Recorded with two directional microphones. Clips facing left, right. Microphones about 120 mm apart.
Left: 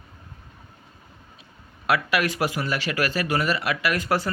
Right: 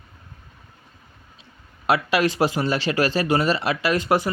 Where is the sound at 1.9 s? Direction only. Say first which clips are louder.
Right 3 dB; 25° right (ahead or behind).